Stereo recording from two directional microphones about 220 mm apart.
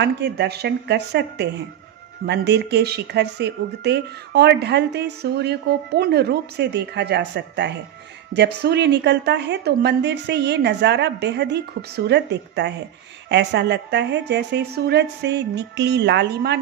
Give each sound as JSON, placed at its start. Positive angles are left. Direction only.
{"t": 0.0, "sound": "speech", "side_deg": -50}